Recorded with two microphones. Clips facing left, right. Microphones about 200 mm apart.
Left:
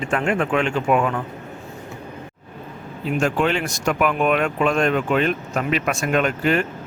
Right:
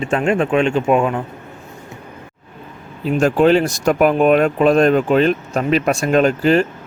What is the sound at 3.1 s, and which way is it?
Speech, 35° right (ahead or behind).